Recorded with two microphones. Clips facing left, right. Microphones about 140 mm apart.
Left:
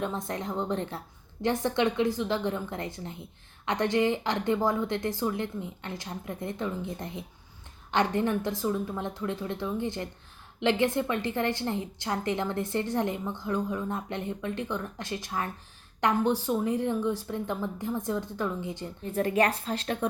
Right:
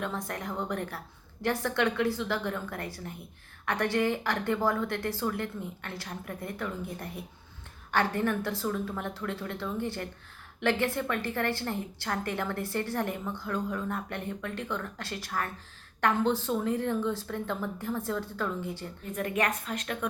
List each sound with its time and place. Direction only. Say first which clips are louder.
0.0 s a woman's voice: left 3 dB; 20° left (ahead or behind)
19.1 s a woman's voice: left 5 dB; 30° left (ahead or behind)